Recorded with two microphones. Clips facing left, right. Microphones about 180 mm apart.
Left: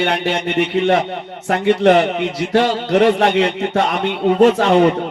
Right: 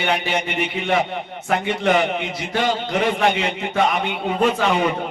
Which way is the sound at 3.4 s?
65° left (ahead or behind).